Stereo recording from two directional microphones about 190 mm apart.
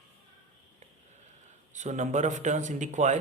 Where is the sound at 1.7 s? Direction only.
40° right (ahead or behind).